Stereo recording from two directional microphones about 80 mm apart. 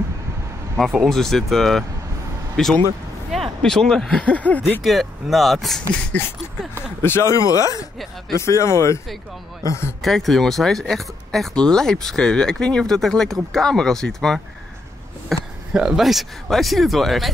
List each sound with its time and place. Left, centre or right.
0.7 s speech: centre; by 4.8 s left
4.8 s speech: centre
6.1 s a sound: centre
7.0 s speech: left
10.0 s speech: centre